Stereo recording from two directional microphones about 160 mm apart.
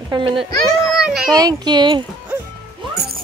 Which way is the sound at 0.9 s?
5° right (ahead or behind).